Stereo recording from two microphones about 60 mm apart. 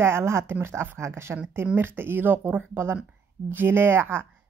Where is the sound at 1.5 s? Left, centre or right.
Right.